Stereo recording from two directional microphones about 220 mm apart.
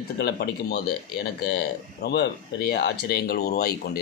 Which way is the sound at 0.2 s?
45° left (ahead or behind).